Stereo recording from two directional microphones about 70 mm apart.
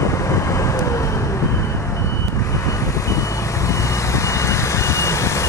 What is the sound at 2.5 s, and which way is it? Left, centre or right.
Vehicle, left.